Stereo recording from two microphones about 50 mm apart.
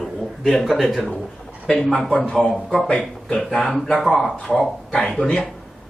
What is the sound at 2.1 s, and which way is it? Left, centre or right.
A man's voice, centre.